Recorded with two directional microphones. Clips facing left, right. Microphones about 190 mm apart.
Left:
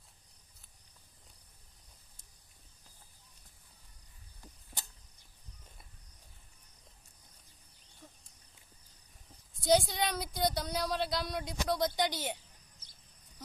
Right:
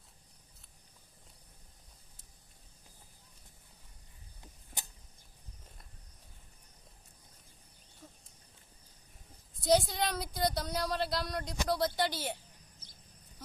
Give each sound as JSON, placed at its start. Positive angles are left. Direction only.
{"t": 8.0, "sound": "a sound", "side_deg": -5}
{"t": 9.6, "sound": "speech", "side_deg": 0}
{"t": 11.9, "sound": "a woman's voice", "side_deg": 20}